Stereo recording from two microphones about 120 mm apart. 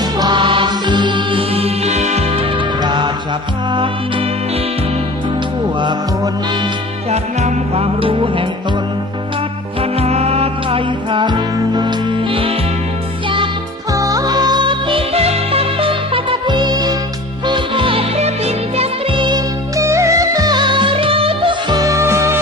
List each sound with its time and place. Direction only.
0.2 s music: 40° right (ahead or behind); by 2.4 s 65° right (ahead or behind)
2.8 s music: 40° right (ahead or behind)
7.1 s music: 60° right (ahead or behind)
10.0 s music: 60° right (ahead or behind)
13.9 s music: 30° right (ahead or behind); by 18.0 s 45° right (ahead or behind)
18.2 s music: 60° right (ahead or behind)
19.1 s music: 40° right (ahead or behind)
19.7 s music: 25° right (ahead or behind); by 21.8 s 45° right (ahead or behind)
21.8 s music: 25° right (ahead or behind)